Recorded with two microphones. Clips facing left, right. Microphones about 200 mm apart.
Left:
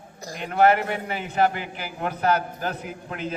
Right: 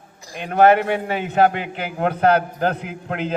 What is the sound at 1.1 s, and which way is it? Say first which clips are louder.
A man's voice: right 4 dB; 65° right (ahead or behind).